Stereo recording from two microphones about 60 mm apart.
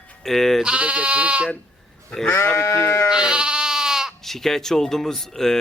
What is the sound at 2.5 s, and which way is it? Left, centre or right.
Speech, left.